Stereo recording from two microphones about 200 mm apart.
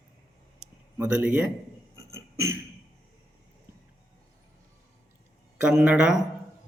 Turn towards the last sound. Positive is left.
turn(degrees=-5)  # may be behind; listen again after turning